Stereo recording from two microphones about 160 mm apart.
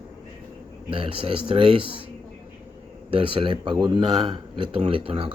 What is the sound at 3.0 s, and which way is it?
Speech, 35° right (ahead or behind).